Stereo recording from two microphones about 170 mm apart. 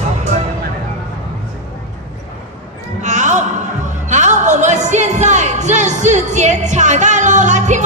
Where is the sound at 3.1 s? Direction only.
45° right (ahead or behind).